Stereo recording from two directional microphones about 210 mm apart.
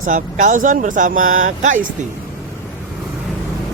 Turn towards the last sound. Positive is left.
turn(degrees=-40)  # may be behind; listen again after turning